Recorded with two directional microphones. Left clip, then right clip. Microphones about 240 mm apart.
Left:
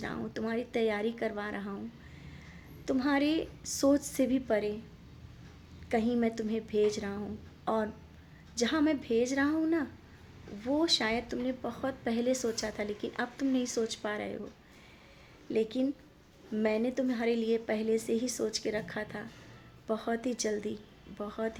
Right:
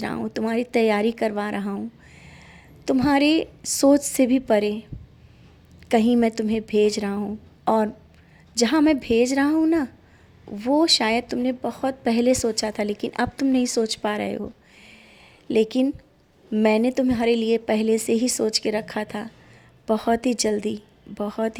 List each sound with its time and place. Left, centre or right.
0.0 s a woman's voice: right
2.8 s a woman's voice: right
5.9 s a woman's voice: right
15.4 s a woman's voice: right